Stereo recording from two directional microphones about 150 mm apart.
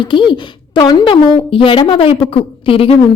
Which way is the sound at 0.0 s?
30° left (ahead or behind).